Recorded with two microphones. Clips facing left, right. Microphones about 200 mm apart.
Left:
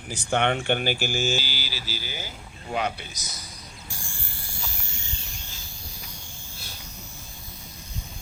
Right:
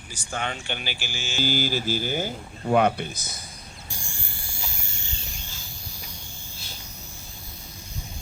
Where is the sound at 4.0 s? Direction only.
15° right (ahead or behind).